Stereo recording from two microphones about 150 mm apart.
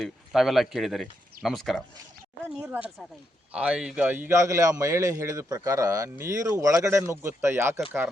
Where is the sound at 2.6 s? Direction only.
10° right (ahead or behind).